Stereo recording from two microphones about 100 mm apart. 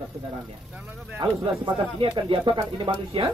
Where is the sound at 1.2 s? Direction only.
50° right (ahead or behind).